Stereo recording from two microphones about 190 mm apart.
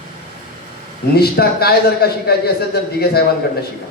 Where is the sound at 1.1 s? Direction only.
55° left (ahead or behind).